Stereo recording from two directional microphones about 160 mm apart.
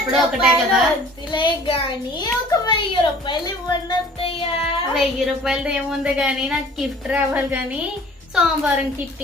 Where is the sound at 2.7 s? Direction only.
30° left (ahead or behind).